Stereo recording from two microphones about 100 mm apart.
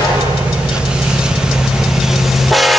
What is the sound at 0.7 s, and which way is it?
Vehicle, 10° right (ahead or behind).